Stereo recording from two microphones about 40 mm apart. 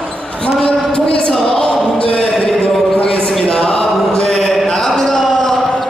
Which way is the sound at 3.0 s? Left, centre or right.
Left.